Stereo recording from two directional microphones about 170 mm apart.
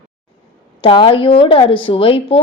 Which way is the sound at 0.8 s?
30° left (ahead or behind).